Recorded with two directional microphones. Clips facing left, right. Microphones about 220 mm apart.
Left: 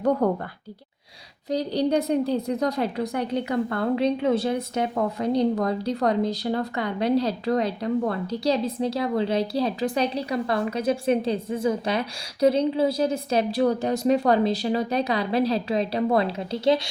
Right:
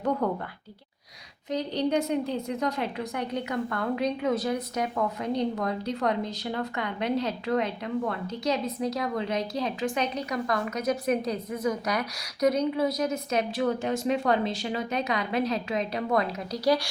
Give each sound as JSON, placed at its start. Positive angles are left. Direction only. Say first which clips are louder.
{"t": 0.2, "sound": "a woman's voice", "louder": "left 5 dB", "side_deg": 40}
{"t": 1.5, "sound": "a woman's voice", "louder": "left 4 dB", "side_deg": 35}